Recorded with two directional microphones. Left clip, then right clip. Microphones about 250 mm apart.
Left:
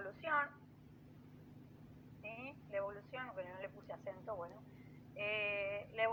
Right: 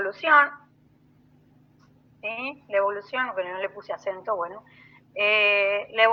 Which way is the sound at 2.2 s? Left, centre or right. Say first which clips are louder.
Right 18 dB; right.